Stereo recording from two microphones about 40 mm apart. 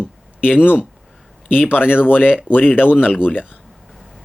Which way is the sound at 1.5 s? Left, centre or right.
Left.